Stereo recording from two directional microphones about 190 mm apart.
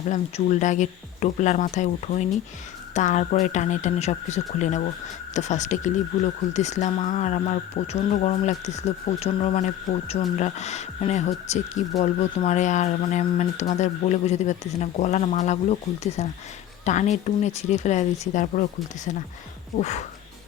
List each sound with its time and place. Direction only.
0.1 s speech: 40° left (ahead or behind)
19.8 s speech: 35° left (ahead or behind)